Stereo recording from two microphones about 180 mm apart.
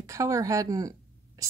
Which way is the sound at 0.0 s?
15° right (ahead or behind).